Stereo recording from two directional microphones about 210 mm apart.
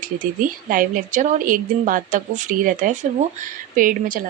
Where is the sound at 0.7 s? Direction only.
40° right (ahead or behind).